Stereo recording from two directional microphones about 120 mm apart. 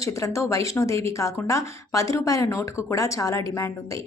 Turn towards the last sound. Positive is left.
turn(degrees=25)  # may be behind; listen again after turning